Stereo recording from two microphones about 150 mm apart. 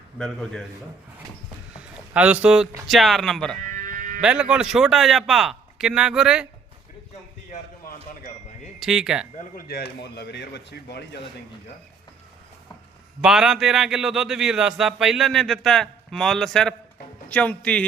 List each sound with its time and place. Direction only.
1.7 s speech: 10° right (ahead or behind)
3.8 s a sound: 60° right (ahead or behind)
4.2 s speech: 5° right (ahead or behind)
8.8 s speech: 5° right (ahead or behind)
9.4 s a man's voice: 80° left
13.2 s speech: 5° right (ahead or behind)